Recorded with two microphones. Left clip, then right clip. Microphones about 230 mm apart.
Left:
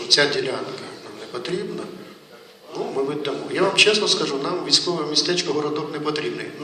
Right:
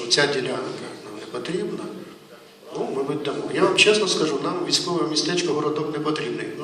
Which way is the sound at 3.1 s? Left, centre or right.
Left.